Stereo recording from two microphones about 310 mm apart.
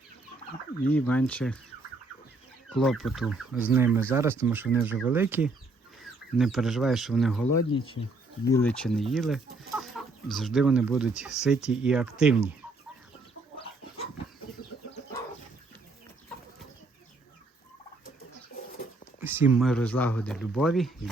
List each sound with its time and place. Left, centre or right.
0.9 s speech: centre
2.6 s speech: centre
7.7 s speech: centre
8.4 s speech: centre
19.2 s speech: centre